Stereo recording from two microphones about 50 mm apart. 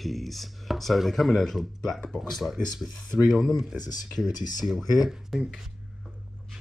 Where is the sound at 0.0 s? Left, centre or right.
Centre.